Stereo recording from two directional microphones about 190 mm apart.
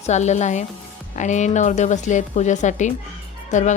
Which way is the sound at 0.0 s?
35° left (ahead or behind).